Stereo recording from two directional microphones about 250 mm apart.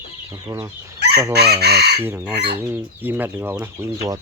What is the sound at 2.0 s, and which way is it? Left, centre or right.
Speech, centre.